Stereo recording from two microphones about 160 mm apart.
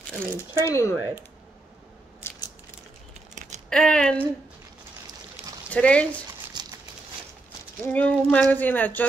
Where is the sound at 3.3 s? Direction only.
50° right (ahead or behind).